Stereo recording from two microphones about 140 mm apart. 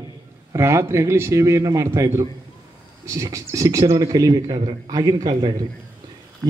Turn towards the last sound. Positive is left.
turn(degrees=-35)  # may be behind; listen again after turning